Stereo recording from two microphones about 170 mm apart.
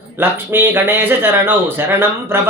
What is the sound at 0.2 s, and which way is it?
Speech, 10° right (ahead or behind).